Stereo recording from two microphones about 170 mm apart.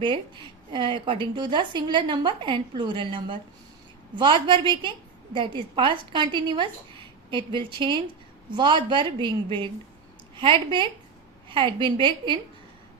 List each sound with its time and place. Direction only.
0.0 s speech: 30° right (ahead or behind)